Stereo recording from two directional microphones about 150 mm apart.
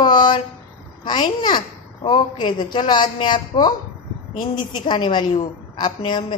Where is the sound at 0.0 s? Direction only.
30° left (ahead or behind).